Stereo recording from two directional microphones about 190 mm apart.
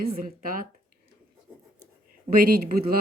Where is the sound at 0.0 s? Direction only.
50° right (ahead or behind).